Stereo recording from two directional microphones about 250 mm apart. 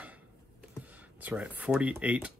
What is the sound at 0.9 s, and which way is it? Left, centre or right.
Speech, centre.